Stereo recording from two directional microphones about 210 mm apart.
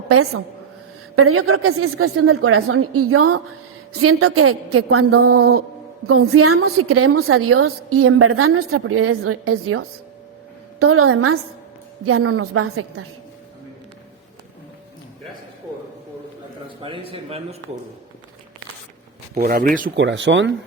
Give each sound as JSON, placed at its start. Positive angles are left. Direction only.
{"t": 1.1, "sound": "a woman's voice", "side_deg": -90}
{"t": 17.1, "sound": "speech", "side_deg": -30}
{"t": 19.3, "sound": "speech", "side_deg": -45}
{"t": 20.0, "sound": "speech", "side_deg": -60}